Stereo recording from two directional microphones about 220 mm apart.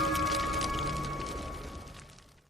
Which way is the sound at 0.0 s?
Centre (ahead or behind).